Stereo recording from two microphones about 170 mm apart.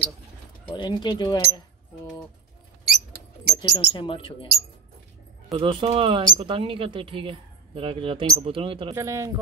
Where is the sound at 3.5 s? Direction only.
30° left (ahead or behind).